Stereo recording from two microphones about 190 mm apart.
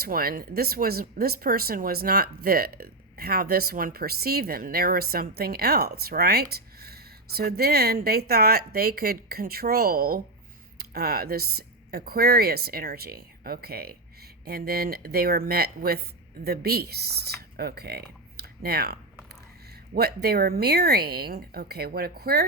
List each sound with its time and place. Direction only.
0.0 s speech: 50° right (ahead or behind)